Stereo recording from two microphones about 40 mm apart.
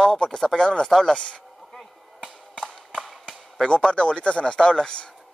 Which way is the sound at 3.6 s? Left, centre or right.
Left.